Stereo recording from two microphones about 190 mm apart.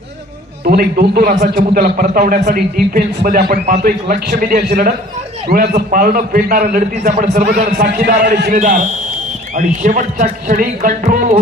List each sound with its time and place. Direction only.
0.7 s a man's voice: 50° right (ahead or behind)